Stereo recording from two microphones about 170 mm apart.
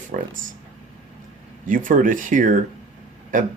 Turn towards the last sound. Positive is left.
turn(degrees=-50)  # may be behind; listen again after turning